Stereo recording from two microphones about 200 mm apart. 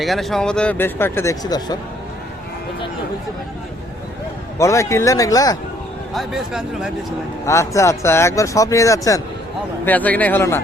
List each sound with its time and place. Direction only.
0.0 s speech: centre (ahead or behind); by 1.8 s 20° left (ahead or behind)
4.5 s speech: 15° left (ahead or behind)
6.1 s speech: centre (ahead or behind)
7.4 s speech: 15° left (ahead or behind)